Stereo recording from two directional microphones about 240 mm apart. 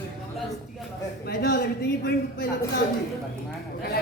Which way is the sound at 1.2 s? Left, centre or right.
Left.